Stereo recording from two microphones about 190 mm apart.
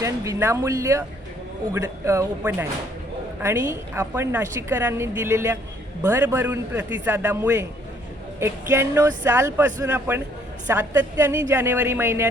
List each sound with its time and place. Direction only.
0.0 s a woman's voice: 15° right (ahead or behind)